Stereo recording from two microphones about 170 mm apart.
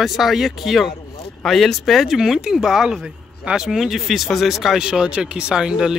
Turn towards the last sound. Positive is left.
turn(degrees=-5)  # may be behind; listen again after turning